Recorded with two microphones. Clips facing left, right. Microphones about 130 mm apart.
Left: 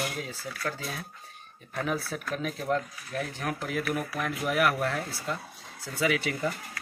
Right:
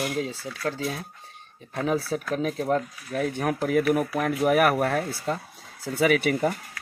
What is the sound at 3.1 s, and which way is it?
Speech, 55° right (ahead or behind).